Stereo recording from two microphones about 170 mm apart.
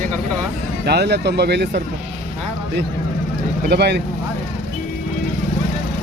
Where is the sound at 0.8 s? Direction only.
75° right (ahead or behind).